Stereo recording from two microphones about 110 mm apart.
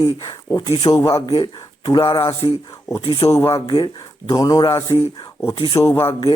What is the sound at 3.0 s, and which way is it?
Speech, 60° left (ahead or behind).